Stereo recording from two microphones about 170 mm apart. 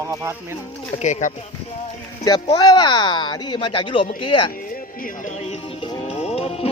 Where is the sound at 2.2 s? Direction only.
25° left (ahead or behind).